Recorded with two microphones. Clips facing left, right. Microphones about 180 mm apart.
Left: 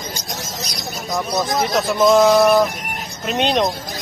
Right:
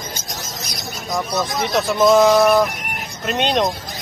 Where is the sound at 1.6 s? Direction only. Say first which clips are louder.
Right 1 dB; centre (ahead or behind).